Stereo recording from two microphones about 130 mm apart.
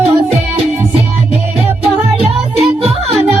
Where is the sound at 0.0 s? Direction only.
50° right (ahead or behind).